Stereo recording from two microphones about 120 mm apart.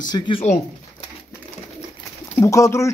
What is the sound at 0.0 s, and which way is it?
Speech, 40° left (ahead or behind).